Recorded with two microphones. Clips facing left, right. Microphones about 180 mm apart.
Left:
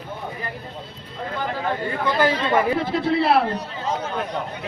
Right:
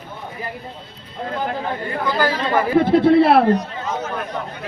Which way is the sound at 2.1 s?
25° left (ahead or behind).